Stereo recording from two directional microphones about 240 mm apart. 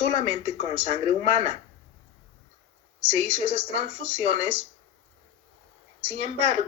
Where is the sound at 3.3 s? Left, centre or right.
Right.